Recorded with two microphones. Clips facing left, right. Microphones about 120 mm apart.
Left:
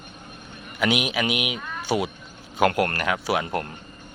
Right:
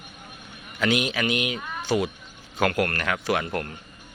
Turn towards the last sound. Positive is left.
turn(degrees=15)  # may be behind; listen again after turning